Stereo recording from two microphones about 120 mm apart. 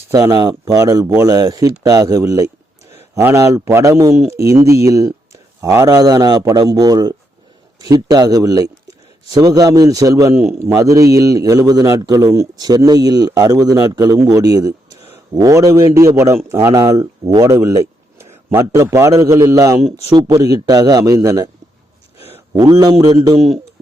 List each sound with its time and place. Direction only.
0.1 s a man's voice: 30° right (ahead or behind)
22.5 s a man's voice: 30° right (ahead or behind)